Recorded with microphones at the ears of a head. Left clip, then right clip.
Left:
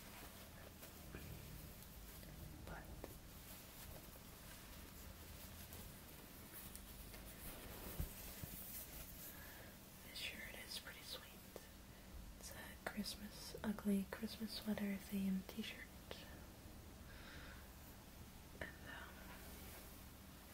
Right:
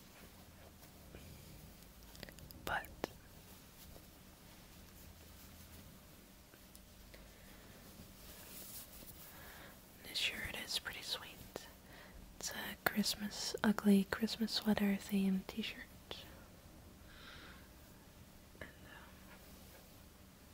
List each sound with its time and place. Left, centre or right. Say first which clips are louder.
2.1 s whispering: right 9 dB; right
10.0 s whispering: right 11 dB; right
12.4 s speech: right 12 dB; right